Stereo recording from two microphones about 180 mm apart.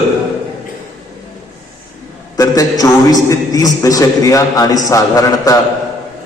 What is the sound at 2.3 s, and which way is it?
A man's voice, 20° left (ahead or behind).